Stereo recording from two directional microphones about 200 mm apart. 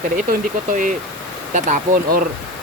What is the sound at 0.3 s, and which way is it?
Speech, 40° right (ahead or behind).